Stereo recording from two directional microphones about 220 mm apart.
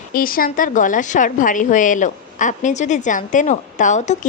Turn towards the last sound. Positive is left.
turn(degrees=35)  # may be behind; listen again after turning